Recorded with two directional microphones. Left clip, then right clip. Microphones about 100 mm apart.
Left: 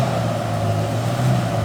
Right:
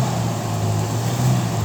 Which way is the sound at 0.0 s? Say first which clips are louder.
Left 3 dB; 20° left (ahead or behind).